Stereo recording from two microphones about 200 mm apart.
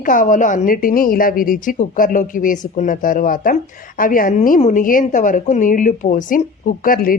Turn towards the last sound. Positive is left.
turn(degrees=45)  # may be behind; listen again after turning